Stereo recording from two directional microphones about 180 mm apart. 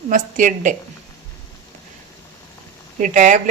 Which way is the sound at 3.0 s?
45° right (ahead or behind).